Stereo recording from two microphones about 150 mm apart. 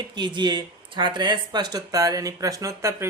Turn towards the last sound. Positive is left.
turn(degrees=-20)  # may be behind; listen again after turning